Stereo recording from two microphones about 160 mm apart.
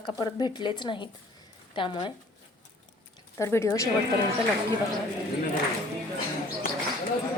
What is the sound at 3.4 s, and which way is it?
Speech, 15° left (ahead or behind).